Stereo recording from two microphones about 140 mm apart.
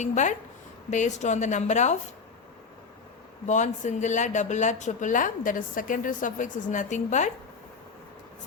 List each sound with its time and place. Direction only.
0.0 s speech: 60° left (ahead or behind)
3.4 s speech: 60° left (ahead or behind)